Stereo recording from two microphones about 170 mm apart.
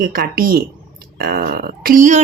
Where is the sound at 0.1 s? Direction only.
55° right (ahead or behind).